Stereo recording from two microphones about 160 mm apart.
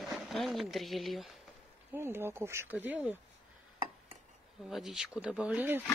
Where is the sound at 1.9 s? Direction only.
15° right (ahead or behind).